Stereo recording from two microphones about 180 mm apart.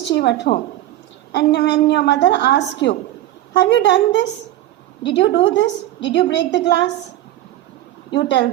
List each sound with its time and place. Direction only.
0.0 s a woman's voice: 70° left (ahead or behind)
8.1 s a woman's voice: 75° left (ahead or behind)